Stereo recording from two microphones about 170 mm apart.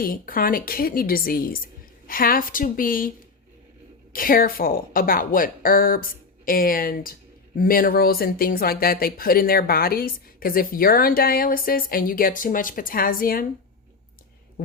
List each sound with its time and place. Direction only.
0.0 s speech: 55° left (ahead or behind)
4.1 s speech: 55° left (ahead or behind)